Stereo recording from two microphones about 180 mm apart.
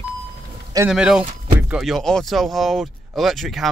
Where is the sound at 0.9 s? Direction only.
5° right (ahead or behind).